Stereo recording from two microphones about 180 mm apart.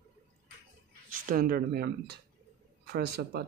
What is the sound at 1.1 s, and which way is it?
Speech, 50° right (ahead or behind).